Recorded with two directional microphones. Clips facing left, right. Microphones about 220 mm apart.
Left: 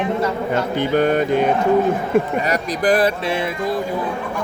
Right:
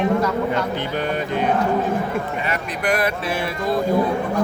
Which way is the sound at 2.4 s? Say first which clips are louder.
Left 5 dB; 35° left (ahead or behind).